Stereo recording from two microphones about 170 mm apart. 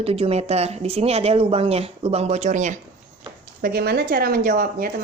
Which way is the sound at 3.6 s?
60° right (ahead or behind).